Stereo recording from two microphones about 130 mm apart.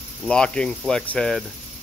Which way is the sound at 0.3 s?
5° left (ahead or behind).